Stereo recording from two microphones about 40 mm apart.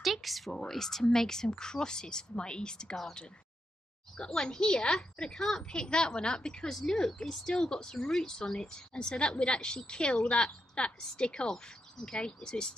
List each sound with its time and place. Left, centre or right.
0.0 s a woman's voice: centre
4.2 s a woman's voice: centre